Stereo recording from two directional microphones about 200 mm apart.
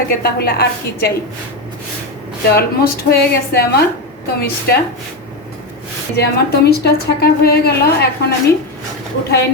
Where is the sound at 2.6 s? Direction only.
50° left (ahead or behind).